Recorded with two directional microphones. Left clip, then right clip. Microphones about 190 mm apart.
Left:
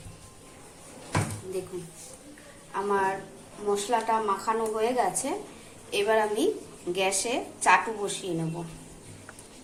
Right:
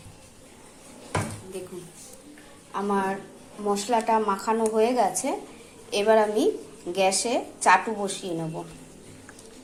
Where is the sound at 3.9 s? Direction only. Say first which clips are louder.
Right 4 dB; 40° right (ahead or behind).